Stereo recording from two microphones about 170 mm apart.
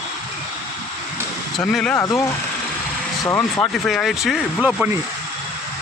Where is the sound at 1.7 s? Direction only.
5° left (ahead or behind).